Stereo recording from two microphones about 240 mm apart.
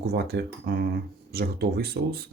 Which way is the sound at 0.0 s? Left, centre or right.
Right.